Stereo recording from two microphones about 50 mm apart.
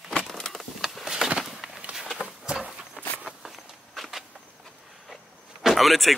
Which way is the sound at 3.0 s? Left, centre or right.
Right.